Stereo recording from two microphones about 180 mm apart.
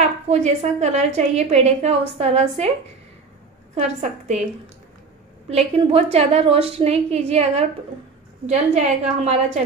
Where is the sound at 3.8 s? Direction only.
40° right (ahead or behind).